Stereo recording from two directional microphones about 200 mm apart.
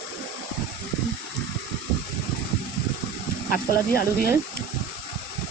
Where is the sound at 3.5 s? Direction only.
50° left (ahead or behind).